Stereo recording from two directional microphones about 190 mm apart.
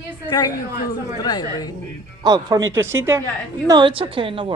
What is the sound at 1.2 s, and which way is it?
Speech, 20° left (ahead or behind).